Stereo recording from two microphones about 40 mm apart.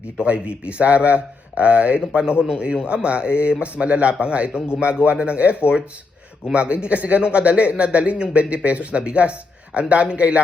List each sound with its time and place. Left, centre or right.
0.2 s speech: right